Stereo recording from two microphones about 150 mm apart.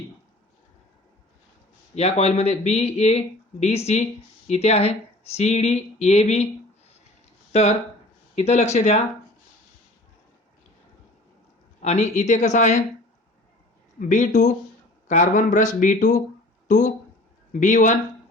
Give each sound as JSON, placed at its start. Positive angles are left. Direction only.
{"t": 2.0, "sound": "speech", "side_deg": 45}
{"t": 8.4, "sound": "speech", "side_deg": 50}
{"t": 11.8, "sound": "speech", "side_deg": 50}
{"t": 14.1, "sound": "speech", "side_deg": 55}